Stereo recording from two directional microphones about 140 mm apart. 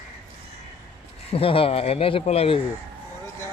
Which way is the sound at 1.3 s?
40° left (ahead or behind).